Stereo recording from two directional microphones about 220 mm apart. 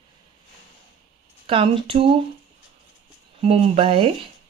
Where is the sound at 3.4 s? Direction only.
25° right (ahead or behind).